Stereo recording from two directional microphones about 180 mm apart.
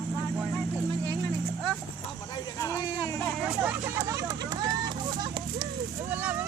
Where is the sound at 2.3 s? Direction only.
20° left (ahead or behind).